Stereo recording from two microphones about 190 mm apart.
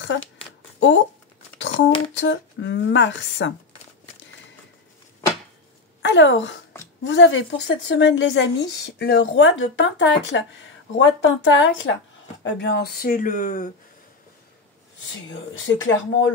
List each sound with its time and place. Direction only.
0.7 s speech: 70° left (ahead or behind)
1.6 s a sound: 70° left (ahead or behind)
2.1 s speech: 70° left (ahead or behind)
6.0 s speech: 75° left (ahead or behind)
8.9 s speech: 60° left (ahead or behind); by 11.9 s 80° left
12.4 s speech: 70° left (ahead or behind); by 13.7 s 45° left (ahead or behind)
15.2 s speech: 85° left